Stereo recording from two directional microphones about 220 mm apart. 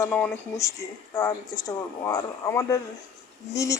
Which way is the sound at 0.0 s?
10° left (ahead or behind).